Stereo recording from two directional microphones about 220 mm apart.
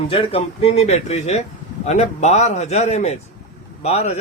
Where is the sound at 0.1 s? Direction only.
25° left (ahead or behind).